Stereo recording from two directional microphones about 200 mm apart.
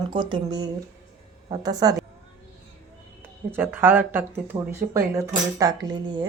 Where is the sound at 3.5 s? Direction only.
10° right (ahead or behind).